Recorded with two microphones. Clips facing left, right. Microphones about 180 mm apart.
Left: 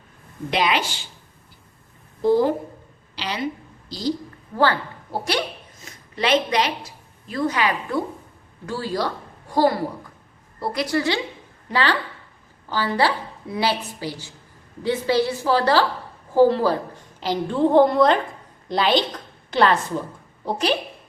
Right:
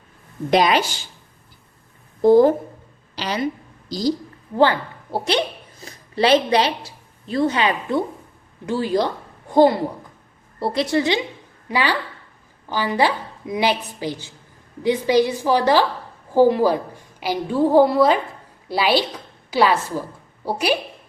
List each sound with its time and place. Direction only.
0.5 s a woman's voice: 40° right (ahead or behind)
2.2 s a woman's voice: 45° right (ahead or behind)
4.5 s a woman's voice: 20° right (ahead or behind)
5.8 s a woman's voice: 35° right (ahead or behind); by 20.7 s 10° right (ahead or behind)